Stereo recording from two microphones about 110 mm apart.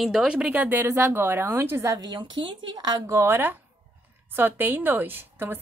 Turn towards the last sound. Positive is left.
turn(degrees=-20)  # may be behind; listen again after turning